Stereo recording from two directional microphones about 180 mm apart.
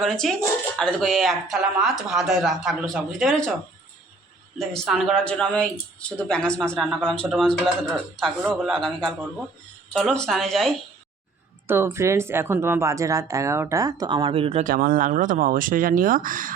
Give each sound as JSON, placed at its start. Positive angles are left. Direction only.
{"t": 0.0, "sound": "speech", "side_deg": 0}
{"t": 4.5, "sound": "speech", "side_deg": 0}
{"t": 11.6, "sound": "speech", "side_deg": -10}
{"t": 14.6, "sound": "speech", "side_deg": -50}